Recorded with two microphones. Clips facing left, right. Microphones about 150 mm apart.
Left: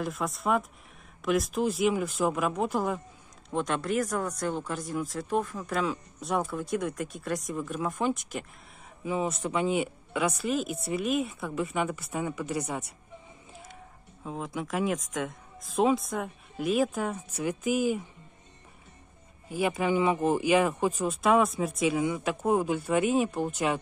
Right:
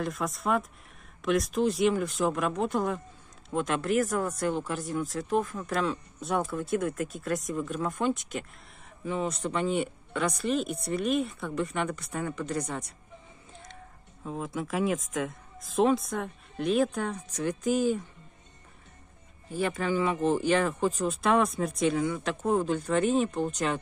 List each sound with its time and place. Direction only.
0.0 s speech: centre (ahead or behind)
13.5 s a sound: 5° left (ahead or behind)
14.2 s speech: centre (ahead or behind)
19.5 s speech: 10° left (ahead or behind)